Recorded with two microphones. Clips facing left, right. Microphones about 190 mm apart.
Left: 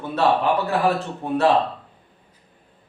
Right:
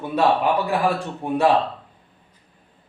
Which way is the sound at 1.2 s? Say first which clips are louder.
Even; 15° right (ahead or behind).